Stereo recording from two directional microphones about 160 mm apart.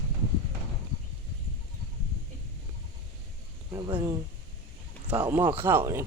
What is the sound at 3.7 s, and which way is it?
Speech, 25° right (ahead or behind).